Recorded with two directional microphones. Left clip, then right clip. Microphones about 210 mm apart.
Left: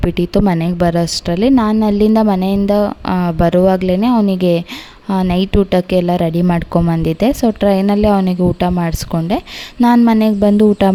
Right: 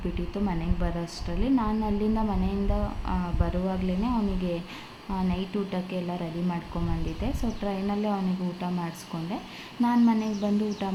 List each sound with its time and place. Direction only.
0.1 s a woman's voice: 55° left (ahead or behind)